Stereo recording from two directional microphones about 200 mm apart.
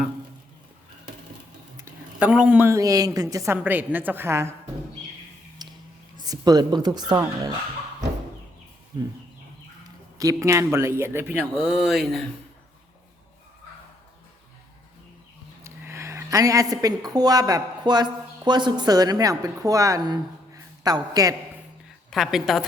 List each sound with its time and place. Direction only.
1.8 s a woman's voice: 5° right (ahead or behind)
5.6 s a sound: 20° right (ahead or behind)
6.1 s a woman's voice: 20° right (ahead or behind)
10.2 s a woman's voice: 15° right (ahead or behind); by 12.2 s centre (ahead or behind)
15.6 s a woman's voice: 15° right (ahead or behind)
22.1 s a woman's voice: centre (ahead or behind)